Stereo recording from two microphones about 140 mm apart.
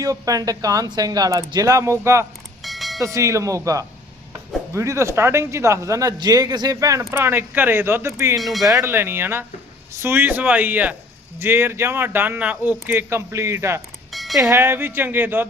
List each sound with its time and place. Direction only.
0.0 s a man's voice: 25° right (ahead or behind)
2.6 s church bell: centre (ahead or behind)
3.0 s a man's voice: 20° right (ahead or behind)
8.4 s speech: centre (ahead or behind)
8.6 s speech: 20° right (ahead or behind)
14.1 s a sound: centre (ahead or behind)
14.3 s speech: 20° right (ahead or behind)